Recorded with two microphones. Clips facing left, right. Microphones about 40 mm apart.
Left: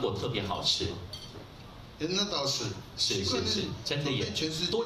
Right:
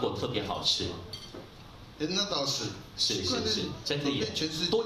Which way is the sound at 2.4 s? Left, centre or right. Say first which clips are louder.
Left 1 dB; left.